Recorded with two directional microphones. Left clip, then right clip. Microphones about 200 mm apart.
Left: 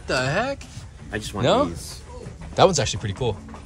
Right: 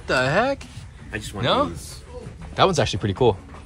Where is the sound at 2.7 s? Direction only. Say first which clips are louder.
Right 3 dB; centre (ahead or behind).